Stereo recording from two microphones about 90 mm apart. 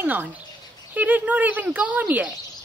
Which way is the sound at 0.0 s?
20° right (ahead or behind).